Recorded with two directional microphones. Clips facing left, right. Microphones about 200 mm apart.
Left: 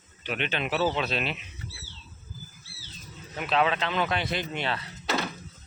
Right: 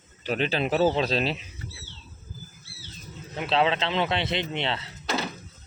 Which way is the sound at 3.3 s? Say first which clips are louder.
Right 2 dB; 25° right (ahead or behind).